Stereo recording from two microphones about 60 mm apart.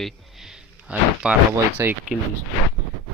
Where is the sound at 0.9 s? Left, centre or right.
Right.